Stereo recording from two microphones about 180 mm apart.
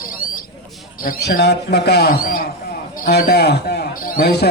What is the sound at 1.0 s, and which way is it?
A man's voice, 55° left (ahead or behind).